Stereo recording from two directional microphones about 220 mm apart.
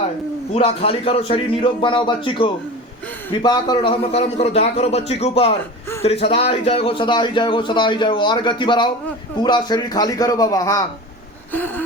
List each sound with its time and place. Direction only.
0.5 s a man's voice: 25° left (ahead or behind); by 11.8 s 10° left (ahead or behind)